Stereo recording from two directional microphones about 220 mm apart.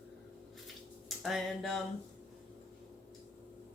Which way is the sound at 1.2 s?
Centre (ahead or behind).